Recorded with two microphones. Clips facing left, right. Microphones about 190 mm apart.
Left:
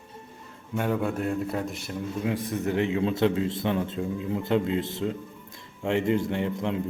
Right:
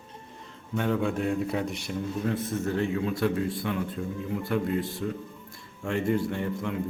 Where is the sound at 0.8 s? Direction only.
5° left (ahead or behind).